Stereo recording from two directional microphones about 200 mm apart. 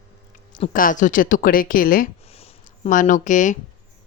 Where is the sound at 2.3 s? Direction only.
30° left (ahead or behind).